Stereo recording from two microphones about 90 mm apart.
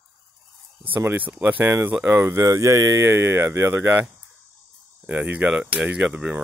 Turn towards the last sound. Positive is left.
turn(degrees=-10)  # may be behind; listen again after turning